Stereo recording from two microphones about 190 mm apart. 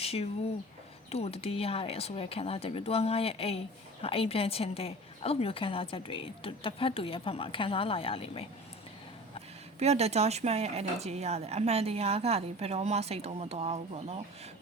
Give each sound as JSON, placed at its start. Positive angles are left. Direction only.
{"t": 0.0, "sound": "a sound", "side_deg": 30}
{"t": 1.1, "sound": "a woman's voice", "side_deg": 30}
{"t": 9.8, "sound": "speech", "side_deg": -35}